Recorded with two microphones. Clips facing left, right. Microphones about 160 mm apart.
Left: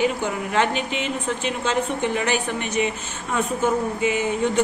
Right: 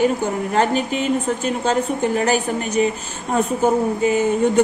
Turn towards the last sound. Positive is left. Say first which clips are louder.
# right 5 dB
turn(degrees=-40)  # may be behind; listen again after turning